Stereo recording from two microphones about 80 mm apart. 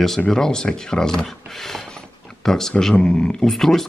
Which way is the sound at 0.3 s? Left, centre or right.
Centre.